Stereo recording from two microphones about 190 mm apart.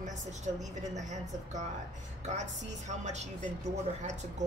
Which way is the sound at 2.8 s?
35° right (ahead or behind).